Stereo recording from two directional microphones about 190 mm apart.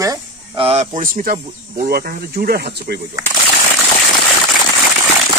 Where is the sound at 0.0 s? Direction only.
20° right (ahead or behind).